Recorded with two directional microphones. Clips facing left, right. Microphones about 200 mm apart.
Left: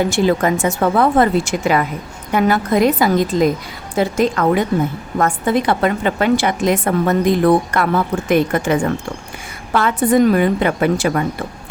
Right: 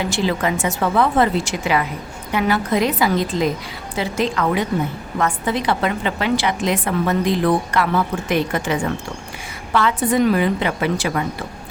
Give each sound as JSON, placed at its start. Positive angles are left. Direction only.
{"t": 0.0, "sound": "a woman's voice", "side_deg": 50}